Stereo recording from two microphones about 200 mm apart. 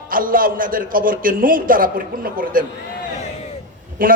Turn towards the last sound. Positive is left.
turn(degrees=-45)  # may be behind; listen again after turning